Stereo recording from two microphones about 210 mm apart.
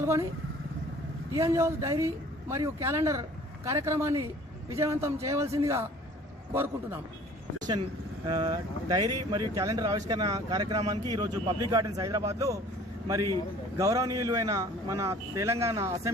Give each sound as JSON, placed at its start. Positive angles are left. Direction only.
{"t": 0.0, "sound": "speech", "side_deg": -10}
{"t": 1.3, "sound": "speech", "side_deg": -15}
{"t": 8.3, "sound": "speech", "side_deg": -20}
{"t": 13.7, "sound": "speech", "side_deg": -15}